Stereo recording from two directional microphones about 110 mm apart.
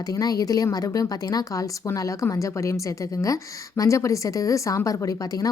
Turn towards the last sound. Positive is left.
turn(degrees=30)  # may be behind; listen again after turning